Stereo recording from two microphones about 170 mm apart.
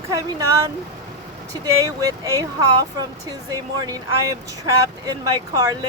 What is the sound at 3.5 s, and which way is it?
Speech, 20° right (ahead or behind).